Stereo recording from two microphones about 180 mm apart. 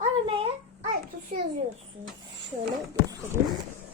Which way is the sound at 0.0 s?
30° right (ahead or behind).